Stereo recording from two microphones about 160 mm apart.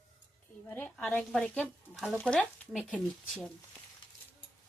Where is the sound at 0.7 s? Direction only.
15° left (ahead or behind).